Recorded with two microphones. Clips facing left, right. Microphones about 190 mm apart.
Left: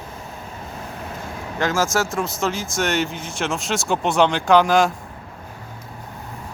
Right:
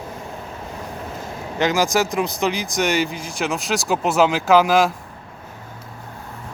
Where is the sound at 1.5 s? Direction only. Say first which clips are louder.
Right 2 dB; 20° right (ahead or behind).